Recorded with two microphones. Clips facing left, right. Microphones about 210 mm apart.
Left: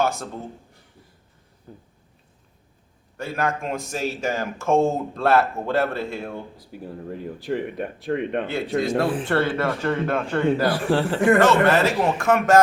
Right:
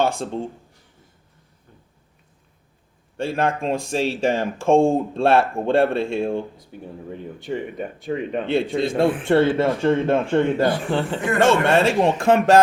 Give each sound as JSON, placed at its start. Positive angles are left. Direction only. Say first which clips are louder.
{"t": 0.0, "sound": "speech", "louder": "right 3 dB", "side_deg": -30}
{"t": 3.2, "sound": "speech", "louder": "right 4 dB", "side_deg": -30}
{"t": 6.6, "sound": "speech", "louder": "left 1 dB", "side_deg": 0}
{"t": 9.2, "sound": "speech", "louder": "right 5 dB", "side_deg": -25}
{"t": 10.7, "sound": "speech", "louder": "left 1 dB", "side_deg": 0}
{"t": 11.3, "sound": "speech", "louder": "right 4 dB", "side_deg": -25}